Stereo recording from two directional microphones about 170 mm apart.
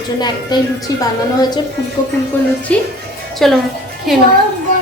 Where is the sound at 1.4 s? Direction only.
25° left (ahead or behind).